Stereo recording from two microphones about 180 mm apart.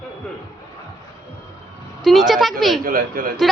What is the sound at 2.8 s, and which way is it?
Speech, 55° right (ahead or behind).